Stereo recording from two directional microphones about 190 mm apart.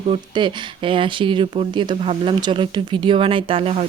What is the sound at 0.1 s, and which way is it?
Speech, 25° right (ahead or behind).